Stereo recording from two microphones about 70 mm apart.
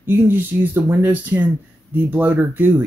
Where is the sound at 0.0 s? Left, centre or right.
Right.